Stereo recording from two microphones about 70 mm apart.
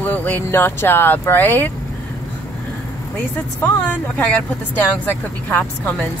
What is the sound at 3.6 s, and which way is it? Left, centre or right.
Speech, left.